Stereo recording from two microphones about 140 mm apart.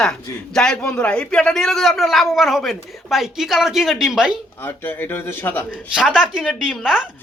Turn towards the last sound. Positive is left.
turn(degrees=-5)  # may be behind; listen again after turning